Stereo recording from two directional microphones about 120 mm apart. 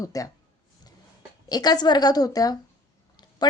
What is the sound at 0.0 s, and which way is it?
Speech, 30° left (ahead or behind).